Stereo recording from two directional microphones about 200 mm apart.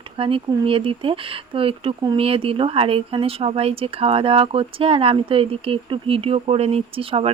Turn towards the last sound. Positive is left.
turn(degrees=-30)  # may be behind; listen again after turning